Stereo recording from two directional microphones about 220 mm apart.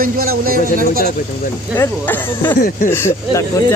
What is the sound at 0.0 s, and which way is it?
Speech, 40° right (ahead or behind).